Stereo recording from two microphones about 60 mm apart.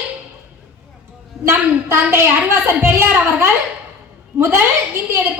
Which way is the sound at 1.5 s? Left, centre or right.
Right.